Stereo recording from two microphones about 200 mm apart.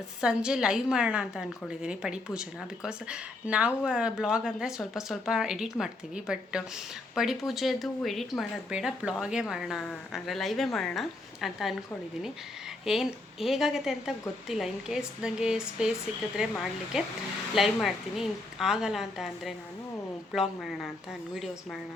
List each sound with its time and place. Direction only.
0.2 s a woman's voice: 5° right (ahead or behind)
12.8 s a woman's voice: centre (ahead or behind)